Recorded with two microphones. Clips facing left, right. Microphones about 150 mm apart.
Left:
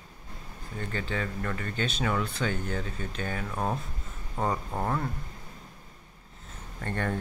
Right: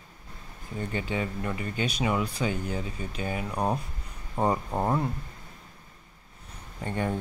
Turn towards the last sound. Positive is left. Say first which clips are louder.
# right 2 dB
turn(degrees=-15)  # may be behind; listen again after turning